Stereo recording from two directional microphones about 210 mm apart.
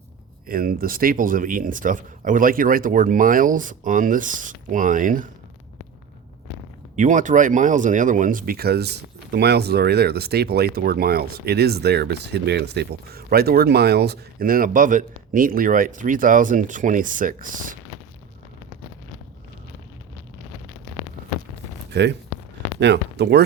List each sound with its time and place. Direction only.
0.4 s speech: 45° right (ahead or behind)
6.9 s speech: 35° right (ahead or behind)
21.9 s speech: 55° right (ahead or behind)